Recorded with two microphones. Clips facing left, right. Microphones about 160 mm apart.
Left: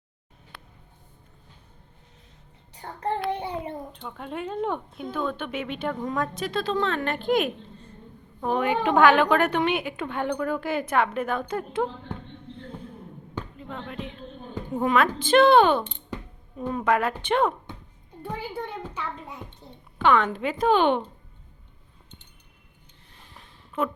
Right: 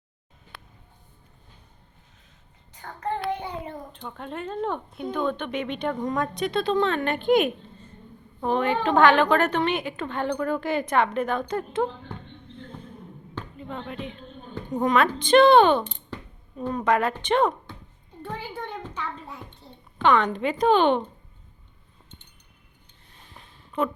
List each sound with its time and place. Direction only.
2.7 s child singing: 30° left (ahead or behind)
3.9 s a woman's voice: 5° left (ahead or behind)
13.6 s a woman's voice: centre (ahead or behind)
18.2 s a sound: 10° left (ahead or behind)
20.0 s speech: 5° left (ahead or behind)
23.8 s speech: 5° left (ahead or behind)